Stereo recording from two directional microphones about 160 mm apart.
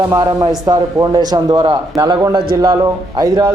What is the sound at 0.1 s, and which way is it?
A man's voice, 25° right (ahead or behind).